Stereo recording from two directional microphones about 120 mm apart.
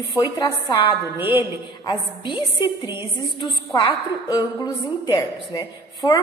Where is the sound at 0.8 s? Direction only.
15° right (ahead or behind).